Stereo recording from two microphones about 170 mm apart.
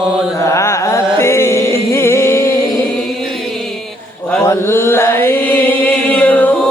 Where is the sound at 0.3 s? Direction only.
15° left (ahead or behind).